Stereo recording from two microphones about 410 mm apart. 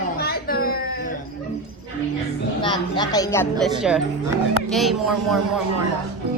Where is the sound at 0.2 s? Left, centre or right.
Left.